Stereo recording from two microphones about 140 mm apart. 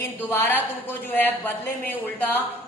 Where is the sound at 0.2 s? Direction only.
15° left (ahead or behind).